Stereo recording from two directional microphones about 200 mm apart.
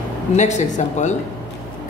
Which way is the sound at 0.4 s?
35° left (ahead or behind).